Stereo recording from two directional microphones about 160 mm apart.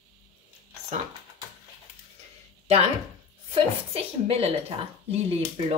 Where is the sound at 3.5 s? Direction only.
40° right (ahead or behind).